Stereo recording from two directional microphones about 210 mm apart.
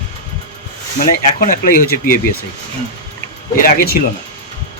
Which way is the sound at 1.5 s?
45° left (ahead or behind).